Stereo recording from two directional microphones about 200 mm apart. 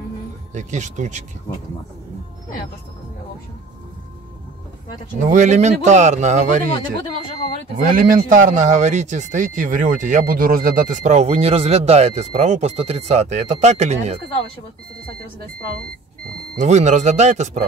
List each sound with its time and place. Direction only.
0.6 s speech: 35° right (ahead or behind)
5.2 s speech: 40° right (ahead or behind)
7.7 s speech: 45° right (ahead or behind)
16.5 s speech: 35° right (ahead or behind)